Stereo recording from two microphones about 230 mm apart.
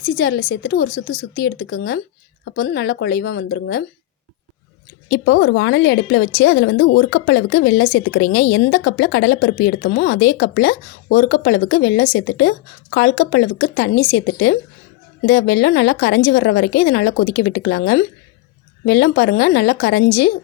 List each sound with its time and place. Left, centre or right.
0.0 s speech: left
5.0 s speech: left